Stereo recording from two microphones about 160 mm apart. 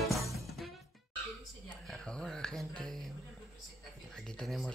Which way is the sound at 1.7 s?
5° left (ahead or behind).